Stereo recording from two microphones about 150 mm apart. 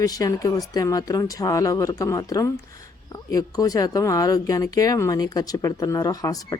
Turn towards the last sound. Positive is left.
turn(degrees=25)  # may be behind; listen again after turning